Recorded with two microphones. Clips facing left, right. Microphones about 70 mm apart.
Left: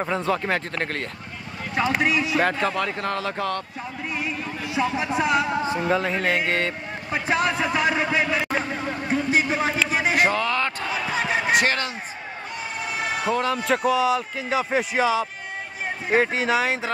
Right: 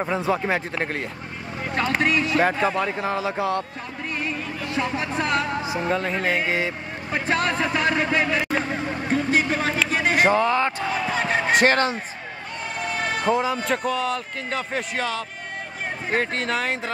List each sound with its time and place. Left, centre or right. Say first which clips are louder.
0.0 s speech: right 1 dB; centre
1.8 s a man's voice: even; centre
2.4 s speech: right 2 dB; centre
4.1 s music: right 1 dB; centre
5.6 s speech: left 2 dB; centre
7.1 s a man's voice: even; centre
9.1 s a sound: right 1 dB; centre
10.1 s speech: right 4 dB; right
11.1 s basketball bounce: even; centre
11.6 s speech: right 5 dB; right
12.8 s a sound: right 1 dB; centre
13.3 s speech: right 2 dB; centre
13.6 s a man's voice: left 3 dB; centre